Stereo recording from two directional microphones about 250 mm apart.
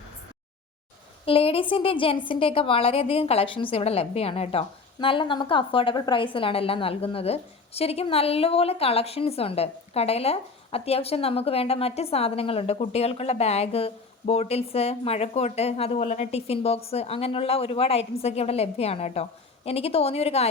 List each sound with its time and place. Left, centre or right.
1.2 s a woman's voice: left